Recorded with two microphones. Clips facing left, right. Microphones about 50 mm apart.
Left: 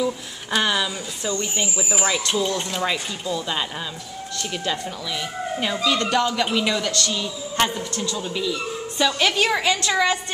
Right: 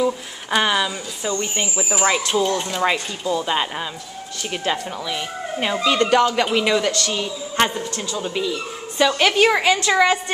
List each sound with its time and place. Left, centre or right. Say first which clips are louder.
0.0 s a woman's voice: right 3 dB; centre